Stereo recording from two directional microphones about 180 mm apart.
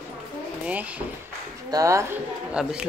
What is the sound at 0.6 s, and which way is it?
Speech, 10° right (ahead or behind).